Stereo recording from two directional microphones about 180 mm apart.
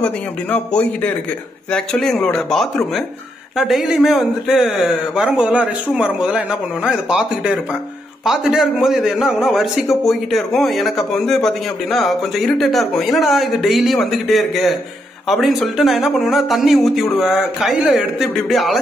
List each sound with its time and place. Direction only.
0.0 s a man's voice: 10° left (ahead or behind)